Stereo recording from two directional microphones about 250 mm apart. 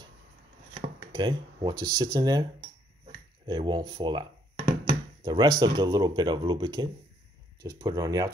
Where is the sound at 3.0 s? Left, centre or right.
Centre.